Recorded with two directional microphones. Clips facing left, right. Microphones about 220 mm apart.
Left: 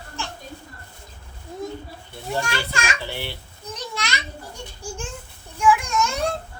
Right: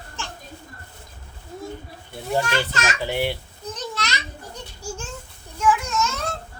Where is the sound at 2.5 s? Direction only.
10° left (ahead or behind).